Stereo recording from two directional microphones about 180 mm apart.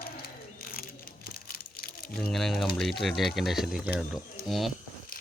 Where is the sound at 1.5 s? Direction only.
55° left (ahead or behind).